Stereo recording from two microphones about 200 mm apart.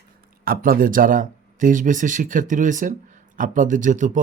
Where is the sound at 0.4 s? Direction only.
45° right (ahead or behind).